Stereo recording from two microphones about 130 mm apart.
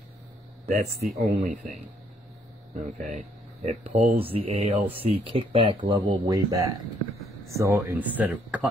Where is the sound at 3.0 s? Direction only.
70° right (ahead or behind).